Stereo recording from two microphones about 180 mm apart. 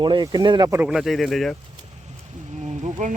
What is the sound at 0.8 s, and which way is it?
Speech, 5° right (ahead or behind).